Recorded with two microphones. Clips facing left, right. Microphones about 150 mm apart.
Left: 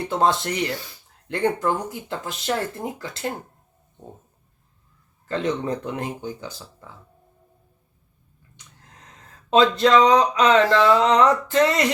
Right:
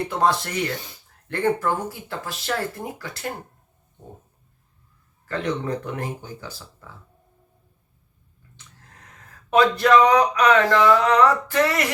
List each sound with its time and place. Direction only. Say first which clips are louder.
0.1 s speech: left 3 dB; 25° left (ahead or behind)
5.2 s speech: left 2 dB; 20° left (ahead or behind)
8.6 s a sound: even; 15° left (ahead or behind)
9.5 s speech: even; 20° left (ahead or behind)